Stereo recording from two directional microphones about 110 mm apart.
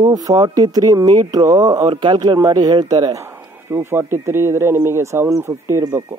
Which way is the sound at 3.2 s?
25° right (ahead or behind).